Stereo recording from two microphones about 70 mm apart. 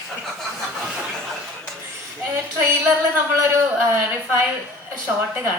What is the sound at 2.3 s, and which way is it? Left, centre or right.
A woman's voice, right.